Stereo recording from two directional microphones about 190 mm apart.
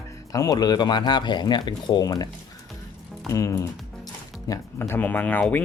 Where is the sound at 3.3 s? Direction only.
15° left (ahead or behind).